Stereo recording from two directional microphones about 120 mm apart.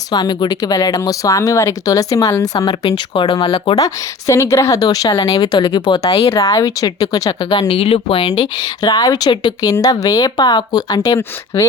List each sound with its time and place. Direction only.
0.1 s speech: 35° left (ahead or behind)
4.3 s speech: 25° left (ahead or behind)
6.3 s speech: 25° left (ahead or behind)
7.7 s speech: 55° left (ahead or behind); by 11.6 s 30° left (ahead or behind)